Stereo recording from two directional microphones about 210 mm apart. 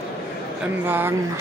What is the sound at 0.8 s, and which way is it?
Speech, 10° right (ahead or behind).